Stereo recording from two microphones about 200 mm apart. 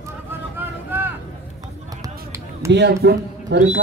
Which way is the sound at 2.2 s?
15° right (ahead or behind).